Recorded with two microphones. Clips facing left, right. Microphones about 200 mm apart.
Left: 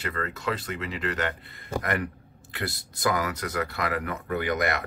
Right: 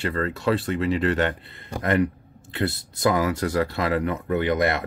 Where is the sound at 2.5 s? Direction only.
25° right (ahead or behind).